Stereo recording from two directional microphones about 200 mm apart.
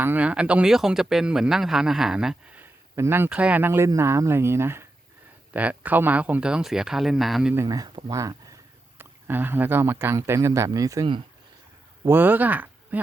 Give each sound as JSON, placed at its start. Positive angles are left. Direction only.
{"t": 0.0, "sound": "speech", "side_deg": -10}
{"t": 7.5, "sound": "speech", "side_deg": -15}
{"t": 12.0, "sound": "speech", "side_deg": -10}